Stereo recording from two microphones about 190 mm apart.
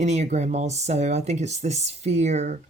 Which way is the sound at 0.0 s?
35° right (ahead or behind).